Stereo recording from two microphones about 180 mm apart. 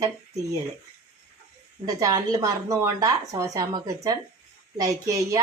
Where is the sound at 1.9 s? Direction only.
20° right (ahead or behind).